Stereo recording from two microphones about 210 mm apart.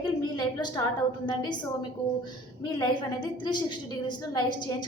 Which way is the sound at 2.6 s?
20° left (ahead or behind).